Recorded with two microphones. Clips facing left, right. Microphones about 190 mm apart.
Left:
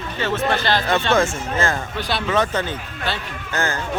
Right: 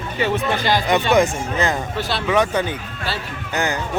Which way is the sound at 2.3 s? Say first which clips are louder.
Right 3 dB; 10° right (ahead or behind).